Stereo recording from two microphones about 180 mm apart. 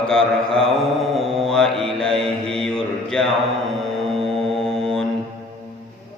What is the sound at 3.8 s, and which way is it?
Music, centre (ahead or behind).